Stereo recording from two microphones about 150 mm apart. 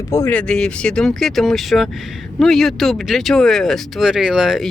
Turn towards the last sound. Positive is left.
turn(degrees=-5)  # may be behind; listen again after turning